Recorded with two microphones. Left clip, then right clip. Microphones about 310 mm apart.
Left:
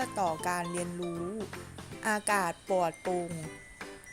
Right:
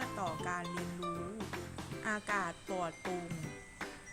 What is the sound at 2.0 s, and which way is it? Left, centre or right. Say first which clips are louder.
Music: left 7 dB; left.